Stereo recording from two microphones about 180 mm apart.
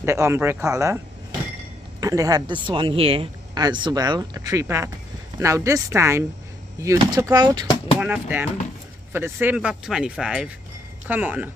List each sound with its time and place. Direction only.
0.0 s speech: 15° right (ahead or behind)
2.0 s speech: 20° right (ahead or behind)
8.0 s speech: 10° right (ahead or behind)